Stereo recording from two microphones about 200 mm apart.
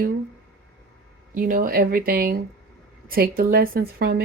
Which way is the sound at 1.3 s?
45° right (ahead or behind).